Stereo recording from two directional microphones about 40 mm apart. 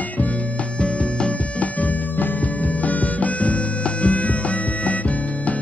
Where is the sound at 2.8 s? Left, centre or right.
Left.